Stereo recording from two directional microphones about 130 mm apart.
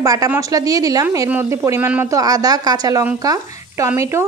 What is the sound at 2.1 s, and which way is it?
A woman's voice, 30° right (ahead or behind).